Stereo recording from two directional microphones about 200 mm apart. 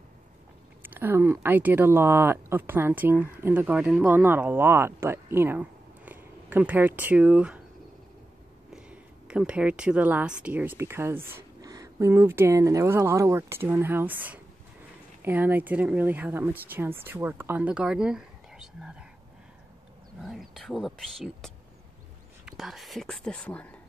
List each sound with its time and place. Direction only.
0.8 s speech: 10° right (ahead or behind)
8.7 s speech: 5° right (ahead or behind)
20.2 s speech: centre (ahead or behind)